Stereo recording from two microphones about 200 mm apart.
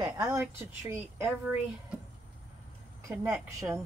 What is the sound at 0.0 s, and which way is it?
A woman's voice, 15° right (ahead or behind).